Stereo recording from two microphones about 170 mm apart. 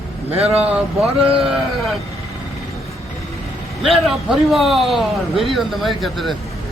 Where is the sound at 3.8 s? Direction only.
Centre (ahead or behind).